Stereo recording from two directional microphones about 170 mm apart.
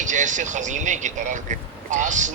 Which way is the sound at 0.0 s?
45° right (ahead or behind).